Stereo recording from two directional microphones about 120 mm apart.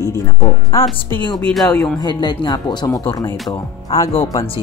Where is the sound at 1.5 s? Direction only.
10° left (ahead or behind).